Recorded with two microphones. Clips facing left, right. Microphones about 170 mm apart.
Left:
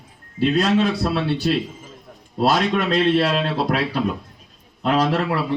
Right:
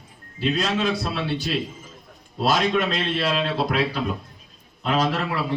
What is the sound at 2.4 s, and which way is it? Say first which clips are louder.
Speech: left 2 dB; 60° left (ahead or behind).